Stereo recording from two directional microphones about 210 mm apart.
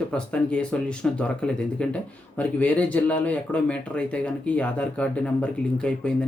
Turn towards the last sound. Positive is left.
turn(degrees=5)  # may be behind; listen again after turning